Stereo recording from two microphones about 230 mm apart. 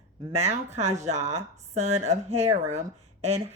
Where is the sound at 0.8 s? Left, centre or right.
Right.